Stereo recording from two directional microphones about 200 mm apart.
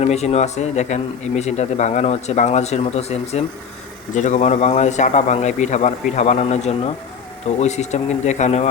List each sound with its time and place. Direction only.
0.0 s a man's voice: 30° left (ahead or behind)